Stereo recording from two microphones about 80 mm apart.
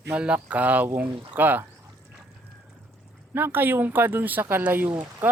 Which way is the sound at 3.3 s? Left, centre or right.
Right.